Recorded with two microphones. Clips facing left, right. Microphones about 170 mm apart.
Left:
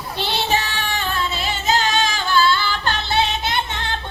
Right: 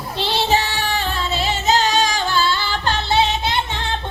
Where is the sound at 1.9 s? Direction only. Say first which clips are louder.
Right 1 dB; 35° right (ahead or behind).